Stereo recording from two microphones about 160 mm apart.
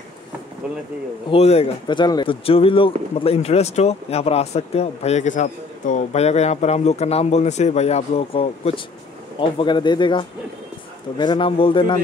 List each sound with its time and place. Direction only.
1.3 s speech: 40° left (ahead or behind)